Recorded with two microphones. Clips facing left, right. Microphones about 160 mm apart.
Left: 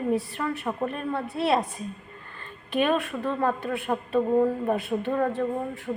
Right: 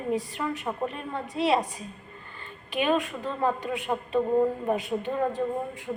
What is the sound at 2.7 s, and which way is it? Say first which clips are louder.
Speech: left 1 dB; 15° right (ahead or behind).